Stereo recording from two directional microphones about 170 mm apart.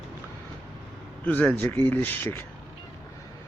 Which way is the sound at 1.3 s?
10° left (ahead or behind).